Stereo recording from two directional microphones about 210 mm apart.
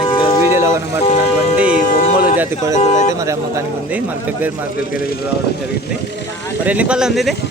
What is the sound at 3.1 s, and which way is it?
Speech, 15° right (ahead or behind).